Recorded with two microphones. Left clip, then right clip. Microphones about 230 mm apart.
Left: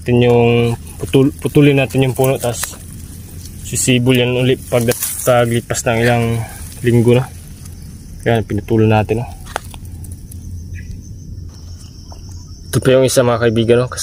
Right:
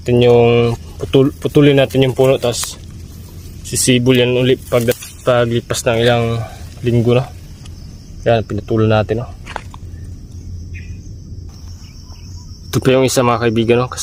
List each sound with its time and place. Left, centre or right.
0.0 s speech: centre
3.7 s speech: centre
12.7 s speech: centre